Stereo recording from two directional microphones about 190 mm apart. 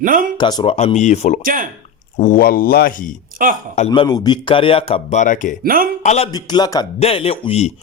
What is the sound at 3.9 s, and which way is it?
A man's voice, 20° left (ahead or behind).